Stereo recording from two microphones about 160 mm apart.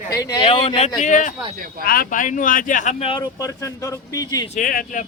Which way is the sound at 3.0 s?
30° left (ahead or behind).